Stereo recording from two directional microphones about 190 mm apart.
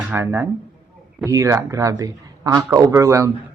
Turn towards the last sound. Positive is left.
turn(degrees=-15)  # may be behind; listen again after turning